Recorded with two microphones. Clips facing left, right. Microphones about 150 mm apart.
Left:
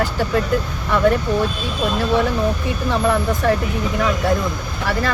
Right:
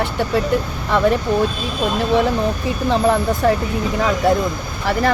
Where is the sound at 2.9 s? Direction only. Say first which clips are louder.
Right 2 dB; 30° right (ahead or behind).